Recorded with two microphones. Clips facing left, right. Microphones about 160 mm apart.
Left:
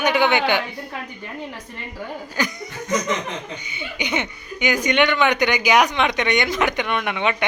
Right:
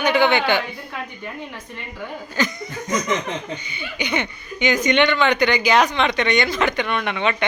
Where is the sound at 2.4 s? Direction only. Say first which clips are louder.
Right 2 dB; 10° left (ahead or behind).